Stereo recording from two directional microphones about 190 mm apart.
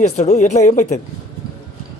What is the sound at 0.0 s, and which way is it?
Speech, 35° left (ahead or behind).